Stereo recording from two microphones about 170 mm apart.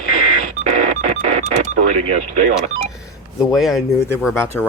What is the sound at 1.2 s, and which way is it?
Music, 45° right (ahead or behind).